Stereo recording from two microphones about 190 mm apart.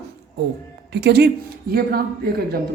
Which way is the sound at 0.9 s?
60° right (ahead or behind).